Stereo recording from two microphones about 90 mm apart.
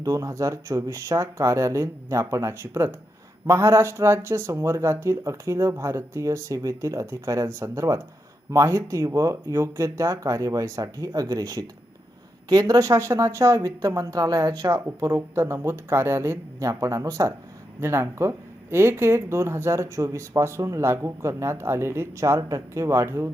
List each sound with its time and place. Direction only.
0.0 s speech: 35° right (ahead or behind)
15.0 s speech: 50° right (ahead or behind)
15.4 s speech: 30° right (ahead or behind)